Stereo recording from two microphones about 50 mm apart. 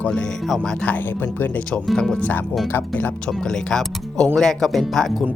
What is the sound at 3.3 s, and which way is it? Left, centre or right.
Speech, centre.